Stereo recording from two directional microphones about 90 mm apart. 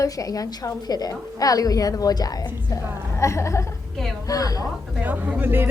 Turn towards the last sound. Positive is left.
turn(degrees=-20)  # may be behind; listen again after turning